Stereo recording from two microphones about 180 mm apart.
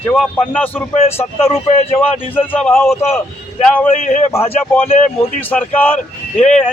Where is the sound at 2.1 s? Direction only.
30° left (ahead or behind).